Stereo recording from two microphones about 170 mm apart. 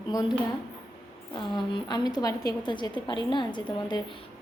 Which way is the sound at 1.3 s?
25° left (ahead or behind).